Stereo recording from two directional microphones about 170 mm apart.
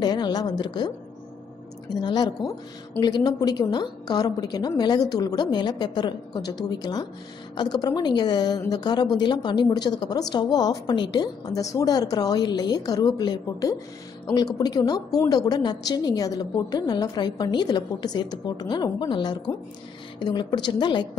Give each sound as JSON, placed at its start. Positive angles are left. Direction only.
{"t": 0.0, "sound": "a woman's voice", "side_deg": 25}